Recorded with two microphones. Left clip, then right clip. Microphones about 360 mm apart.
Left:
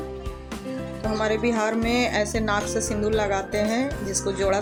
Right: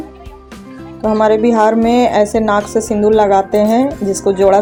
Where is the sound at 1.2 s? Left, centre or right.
Left.